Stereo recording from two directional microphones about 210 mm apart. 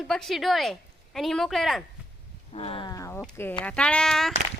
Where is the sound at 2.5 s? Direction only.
25° left (ahead or behind).